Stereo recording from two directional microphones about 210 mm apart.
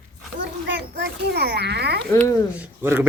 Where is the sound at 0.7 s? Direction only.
55° right (ahead or behind).